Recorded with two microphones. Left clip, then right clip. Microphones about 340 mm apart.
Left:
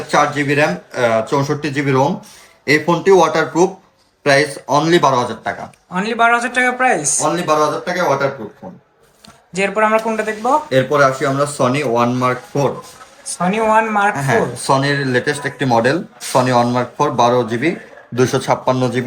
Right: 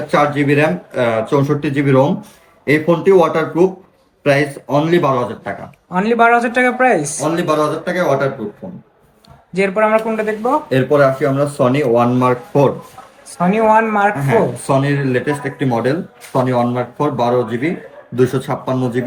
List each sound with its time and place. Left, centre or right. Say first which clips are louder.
0.1 s speech: right 1 dB; centre
5.9 s speech: right 2 dB; centre
9.5 s speech: right 1 dB; centre; by 19.0 s left